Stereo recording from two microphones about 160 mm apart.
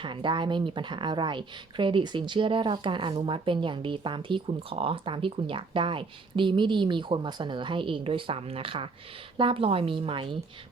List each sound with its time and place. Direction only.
0.0 s speech: 30° right (ahead or behind)